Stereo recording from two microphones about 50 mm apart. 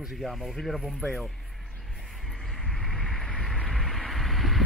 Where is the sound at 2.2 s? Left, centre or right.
Centre.